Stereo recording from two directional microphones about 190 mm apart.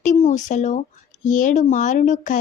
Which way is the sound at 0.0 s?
40° left (ahead or behind).